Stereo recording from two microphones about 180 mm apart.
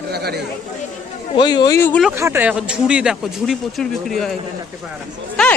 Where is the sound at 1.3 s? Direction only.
25° left (ahead or behind).